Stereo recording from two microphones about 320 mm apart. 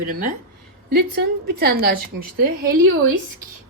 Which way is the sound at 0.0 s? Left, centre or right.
Right.